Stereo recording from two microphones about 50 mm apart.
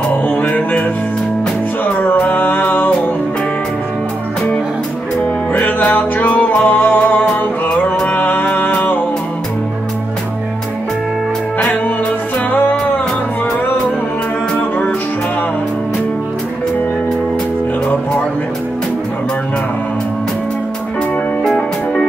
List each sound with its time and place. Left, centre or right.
0.5 s music: left
2.1 s music: left
5.5 s music: left
21.5 s music: centre